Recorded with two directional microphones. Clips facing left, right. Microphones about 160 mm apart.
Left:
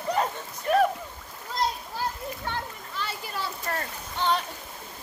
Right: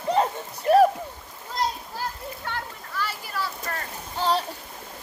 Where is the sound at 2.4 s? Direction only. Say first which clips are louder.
Right 1 dB; 20° left (ahead or behind).